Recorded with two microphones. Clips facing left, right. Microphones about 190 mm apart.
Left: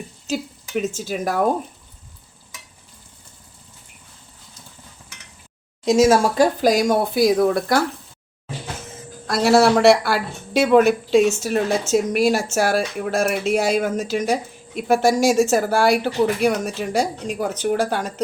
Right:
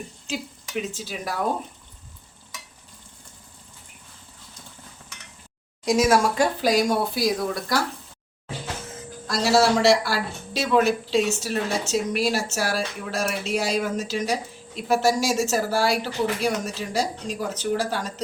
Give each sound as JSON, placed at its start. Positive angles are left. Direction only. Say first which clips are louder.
{"t": 0.3, "sound": "speech", "louder": "left 7 dB", "side_deg": 45}
{"t": 5.8, "sound": "speech", "louder": "left 4 dB", "side_deg": 25}
{"t": 9.2, "sound": "speech", "louder": "left 5 dB", "side_deg": 55}